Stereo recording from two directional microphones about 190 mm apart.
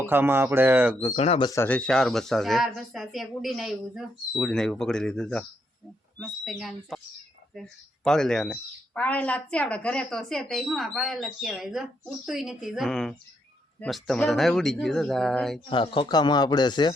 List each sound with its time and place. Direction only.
0.0 s speech: 10° right (ahead or behind)
1.1 s speech: 30° left (ahead or behind)
1.5 s speech: 10° left (ahead or behind)
8.0 s speech: 5° left (ahead or behind)
15.7 s speech: 25° left (ahead or behind)